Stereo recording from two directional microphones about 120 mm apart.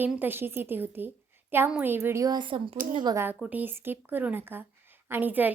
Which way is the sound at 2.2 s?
40° right (ahead or behind).